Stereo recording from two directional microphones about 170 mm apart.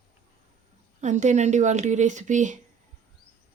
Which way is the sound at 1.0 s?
45° right (ahead or behind).